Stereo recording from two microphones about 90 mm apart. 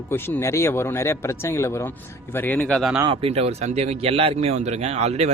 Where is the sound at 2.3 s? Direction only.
20° left (ahead or behind).